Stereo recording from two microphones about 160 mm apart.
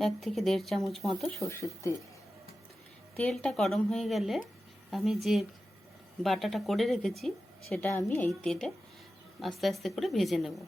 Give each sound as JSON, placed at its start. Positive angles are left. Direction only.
{"t": 0.0, "sound": "a woman's voice", "side_deg": 0}
{"t": 1.5, "sound": "speech", "side_deg": 20}
{"t": 3.2, "sound": "a woman's voice", "side_deg": 0}